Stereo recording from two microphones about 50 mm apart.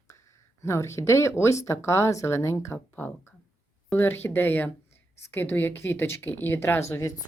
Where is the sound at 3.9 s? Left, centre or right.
Left.